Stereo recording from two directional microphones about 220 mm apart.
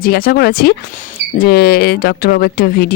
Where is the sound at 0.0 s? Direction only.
40° left (ahead or behind).